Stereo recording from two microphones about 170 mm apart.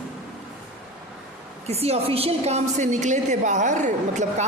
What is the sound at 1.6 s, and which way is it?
A woman's voice, 35° right (ahead or behind).